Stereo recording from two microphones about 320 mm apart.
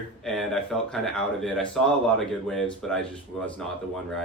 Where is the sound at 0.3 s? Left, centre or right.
Centre.